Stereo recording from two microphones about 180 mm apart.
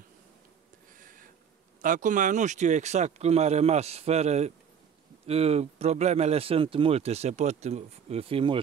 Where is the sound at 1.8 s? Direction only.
45° right (ahead or behind).